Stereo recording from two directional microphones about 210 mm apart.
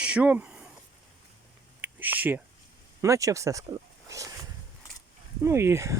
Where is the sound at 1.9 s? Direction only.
10° right (ahead or behind).